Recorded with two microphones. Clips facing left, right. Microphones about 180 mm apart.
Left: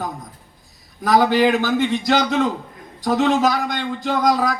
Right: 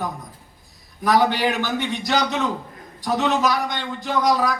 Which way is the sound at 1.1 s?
45° left (ahead or behind).